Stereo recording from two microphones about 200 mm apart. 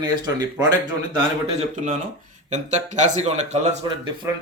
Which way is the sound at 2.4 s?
35° right (ahead or behind).